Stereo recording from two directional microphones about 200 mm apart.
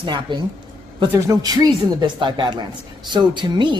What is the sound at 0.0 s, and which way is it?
Speech, 25° right (ahead or behind).